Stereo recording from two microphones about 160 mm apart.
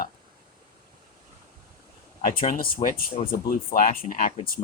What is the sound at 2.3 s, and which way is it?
Speech, 60° left (ahead or behind).